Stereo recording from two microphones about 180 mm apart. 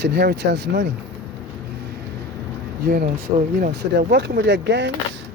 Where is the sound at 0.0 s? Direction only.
65° right (ahead or behind).